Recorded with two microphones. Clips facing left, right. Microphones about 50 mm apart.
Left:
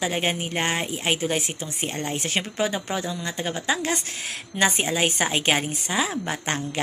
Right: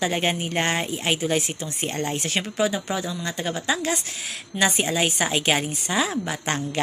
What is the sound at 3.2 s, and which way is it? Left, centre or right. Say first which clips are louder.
A woman's voice: right 1 dB; left.